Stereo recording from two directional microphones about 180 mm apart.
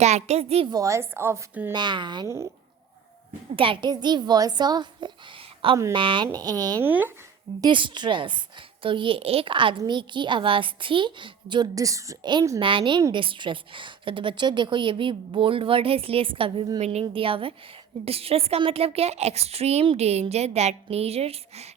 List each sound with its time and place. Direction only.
0.0 s a woman's voice: 40° right (ahead or behind)
0.7 s a woman's voice: 20° right (ahead or behind)
1.7 s a child's voice: 25° right (ahead or behind)
3.5 s a child's voice: 30° right (ahead or behind)
6.8 s a woman's voice: 10° right (ahead or behind)
7.6 s a child's voice: 25° right (ahead or behind)